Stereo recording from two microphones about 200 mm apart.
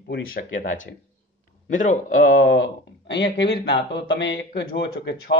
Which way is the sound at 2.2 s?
60° left (ahead or behind).